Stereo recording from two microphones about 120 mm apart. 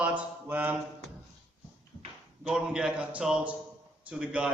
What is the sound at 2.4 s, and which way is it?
A man's voice, 5° right (ahead or behind).